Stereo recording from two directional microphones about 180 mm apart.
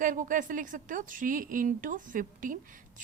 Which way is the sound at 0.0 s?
45° right (ahead or behind).